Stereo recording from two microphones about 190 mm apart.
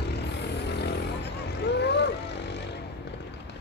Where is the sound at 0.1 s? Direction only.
60° left (ahead or behind).